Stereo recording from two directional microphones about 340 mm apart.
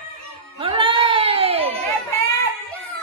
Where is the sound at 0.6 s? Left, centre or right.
Centre.